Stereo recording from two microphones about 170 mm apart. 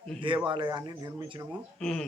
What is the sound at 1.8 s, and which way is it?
Speech, 5° left (ahead or behind).